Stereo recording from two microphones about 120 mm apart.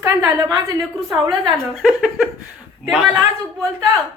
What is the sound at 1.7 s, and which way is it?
Speech, centre (ahead or behind).